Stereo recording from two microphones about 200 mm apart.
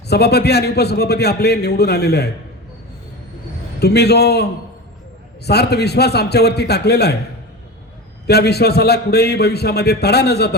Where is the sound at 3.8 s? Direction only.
55° left (ahead or behind).